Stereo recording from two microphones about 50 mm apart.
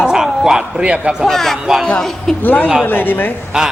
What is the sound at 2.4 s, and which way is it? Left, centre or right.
Speech, left.